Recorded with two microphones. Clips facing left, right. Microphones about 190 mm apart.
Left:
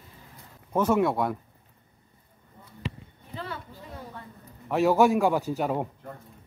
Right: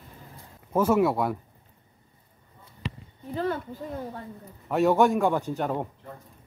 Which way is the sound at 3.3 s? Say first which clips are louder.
Right 9 dB; 45° right (ahead or behind).